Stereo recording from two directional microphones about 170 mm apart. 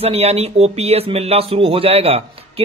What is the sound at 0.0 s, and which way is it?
Speech, 35° right (ahead or behind).